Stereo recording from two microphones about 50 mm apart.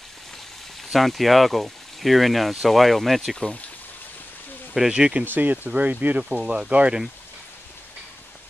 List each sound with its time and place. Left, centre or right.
0.9 s speech: centre
4.7 s speech: centre
5.2 s speech: right
6.4 s speech: centre